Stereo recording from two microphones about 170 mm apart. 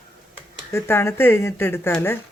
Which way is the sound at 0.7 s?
15° left (ahead or behind).